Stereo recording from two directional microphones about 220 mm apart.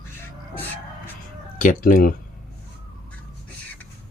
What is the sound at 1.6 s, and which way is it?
Speech, 40° left (ahead or behind).